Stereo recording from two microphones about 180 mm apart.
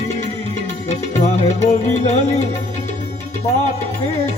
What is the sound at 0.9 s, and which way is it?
Music, 40° left (ahead or behind).